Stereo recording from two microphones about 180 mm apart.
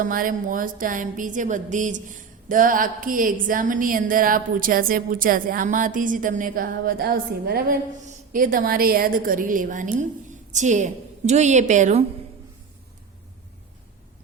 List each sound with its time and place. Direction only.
0.0 s a woman's voice: 50° right (ahead or behind)